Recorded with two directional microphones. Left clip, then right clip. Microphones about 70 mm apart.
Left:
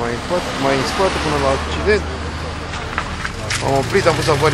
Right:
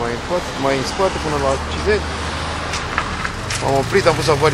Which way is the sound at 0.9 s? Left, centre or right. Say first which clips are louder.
Left 1 dB; left.